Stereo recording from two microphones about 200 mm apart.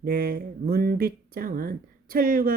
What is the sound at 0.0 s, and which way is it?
Speech, 50° right (ahead or behind).